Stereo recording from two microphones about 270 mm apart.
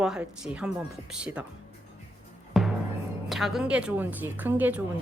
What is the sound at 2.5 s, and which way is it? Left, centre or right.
Music, centre.